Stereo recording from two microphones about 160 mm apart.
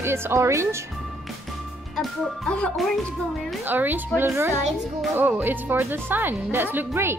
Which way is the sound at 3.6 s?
10° right (ahead or behind).